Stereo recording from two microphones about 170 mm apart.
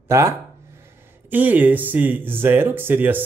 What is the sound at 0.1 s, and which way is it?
A man's voice, 15° right (ahead or behind).